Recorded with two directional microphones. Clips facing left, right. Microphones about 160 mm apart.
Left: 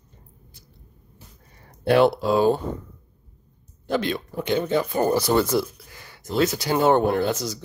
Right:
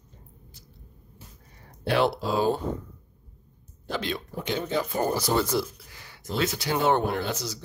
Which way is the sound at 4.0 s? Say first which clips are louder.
Left 5 dB; 55° left (ahead or behind).